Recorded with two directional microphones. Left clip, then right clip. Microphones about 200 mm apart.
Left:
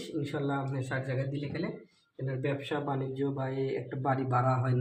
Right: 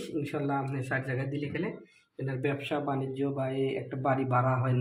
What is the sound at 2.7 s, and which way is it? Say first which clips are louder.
Speech: right 2 dB; 10° right (ahead or behind).